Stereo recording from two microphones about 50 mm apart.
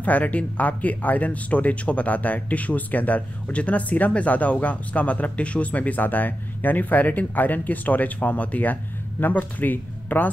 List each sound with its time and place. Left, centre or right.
0.0 s speech: left